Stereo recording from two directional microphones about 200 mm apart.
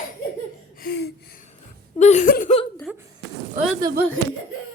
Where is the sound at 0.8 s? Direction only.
55° left (ahead or behind).